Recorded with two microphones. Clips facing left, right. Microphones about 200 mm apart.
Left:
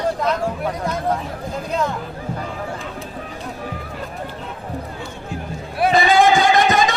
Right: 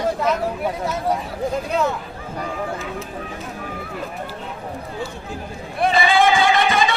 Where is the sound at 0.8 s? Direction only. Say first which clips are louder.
Left 1 dB; 5° right (ahead or behind).